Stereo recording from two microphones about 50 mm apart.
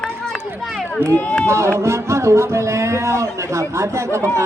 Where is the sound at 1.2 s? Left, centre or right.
Left.